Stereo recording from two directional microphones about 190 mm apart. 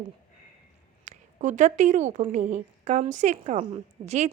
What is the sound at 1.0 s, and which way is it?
A woman's voice, 40° right (ahead or behind).